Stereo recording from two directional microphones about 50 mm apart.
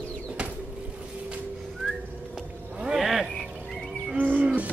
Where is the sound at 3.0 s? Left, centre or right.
Centre.